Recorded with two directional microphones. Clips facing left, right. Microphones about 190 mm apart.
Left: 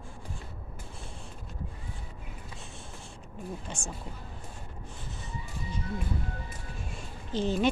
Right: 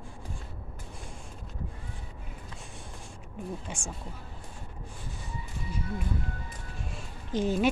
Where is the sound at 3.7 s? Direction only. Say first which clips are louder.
Even; 10° right (ahead or behind).